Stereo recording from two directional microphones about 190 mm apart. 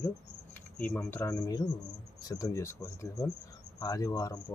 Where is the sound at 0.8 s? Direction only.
10° left (ahead or behind).